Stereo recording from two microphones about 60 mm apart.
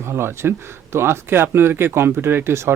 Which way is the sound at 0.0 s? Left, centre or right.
Right.